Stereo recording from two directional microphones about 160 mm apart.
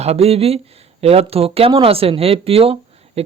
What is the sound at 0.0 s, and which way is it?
Speech, 40° right (ahead or behind).